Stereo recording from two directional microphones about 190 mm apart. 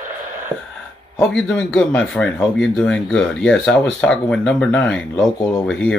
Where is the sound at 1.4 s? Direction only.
5° left (ahead or behind).